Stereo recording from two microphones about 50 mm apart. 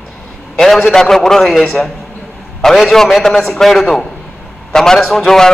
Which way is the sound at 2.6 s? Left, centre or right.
Centre.